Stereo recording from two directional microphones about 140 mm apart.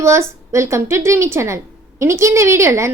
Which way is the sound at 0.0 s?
20° right (ahead or behind).